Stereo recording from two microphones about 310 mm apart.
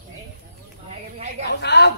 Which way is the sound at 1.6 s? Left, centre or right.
Left.